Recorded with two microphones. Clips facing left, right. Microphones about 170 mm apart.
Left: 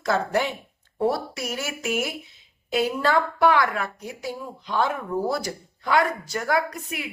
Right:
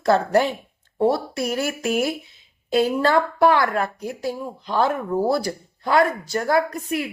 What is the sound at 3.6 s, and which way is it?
Speech, 45° right (ahead or behind).